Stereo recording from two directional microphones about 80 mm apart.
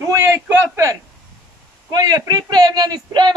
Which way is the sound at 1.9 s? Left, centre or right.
Right.